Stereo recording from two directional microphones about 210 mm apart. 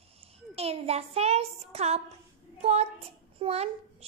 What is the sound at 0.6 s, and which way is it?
A child's voice, 30° right (ahead or behind).